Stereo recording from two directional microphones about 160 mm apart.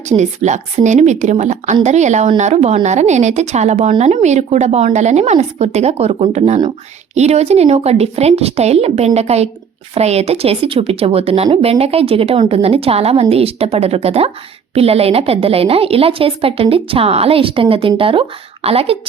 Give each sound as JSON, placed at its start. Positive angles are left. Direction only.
{"t": 0.1, "sound": "a woman's voice", "side_deg": -45}